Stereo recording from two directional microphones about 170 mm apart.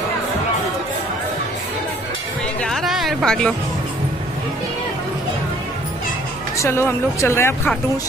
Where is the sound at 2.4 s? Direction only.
5° left (ahead or behind).